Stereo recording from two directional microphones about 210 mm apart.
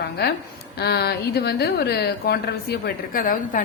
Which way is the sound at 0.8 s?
50° left (ahead or behind).